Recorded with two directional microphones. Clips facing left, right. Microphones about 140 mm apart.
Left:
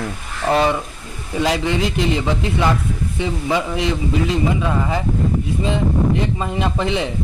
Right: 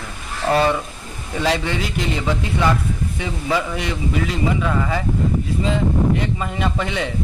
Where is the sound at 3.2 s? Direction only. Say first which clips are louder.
Left 2 dB; 20° left (ahead or behind).